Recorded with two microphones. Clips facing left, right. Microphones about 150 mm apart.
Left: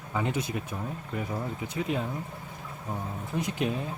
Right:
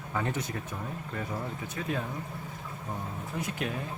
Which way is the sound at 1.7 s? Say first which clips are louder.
Left 3 dB; 20° left (ahead or behind).